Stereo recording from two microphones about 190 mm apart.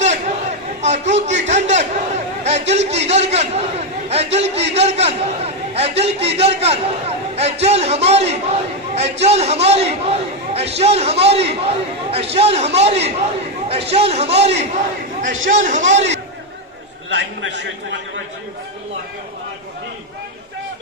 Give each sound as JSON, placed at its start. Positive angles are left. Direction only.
{"t": 0.0, "sound": "a man's voice", "side_deg": -35}
{"t": 17.1, "sound": "a man's voice", "side_deg": -70}